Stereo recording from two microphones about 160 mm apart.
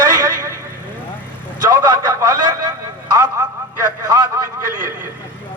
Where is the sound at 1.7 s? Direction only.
20° right (ahead or behind).